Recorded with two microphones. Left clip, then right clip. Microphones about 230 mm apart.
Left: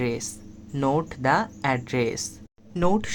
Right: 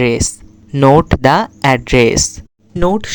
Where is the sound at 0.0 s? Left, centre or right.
Right.